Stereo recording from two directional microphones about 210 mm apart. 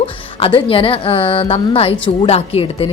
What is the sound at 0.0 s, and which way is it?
A woman's voice, 25° left (ahead or behind).